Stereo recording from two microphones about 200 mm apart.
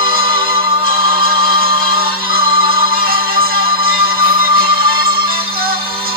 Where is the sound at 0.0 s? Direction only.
50° right (ahead or behind).